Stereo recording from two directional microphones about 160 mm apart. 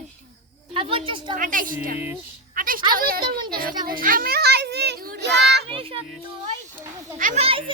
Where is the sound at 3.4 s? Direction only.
25° right (ahead or behind).